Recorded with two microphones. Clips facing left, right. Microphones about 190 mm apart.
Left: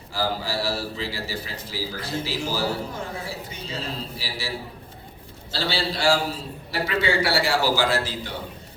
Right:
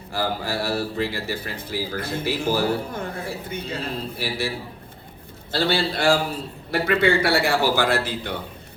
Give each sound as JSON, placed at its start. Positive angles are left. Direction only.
{"t": 0.1, "sound": "a man's voice", "side_deg": -55}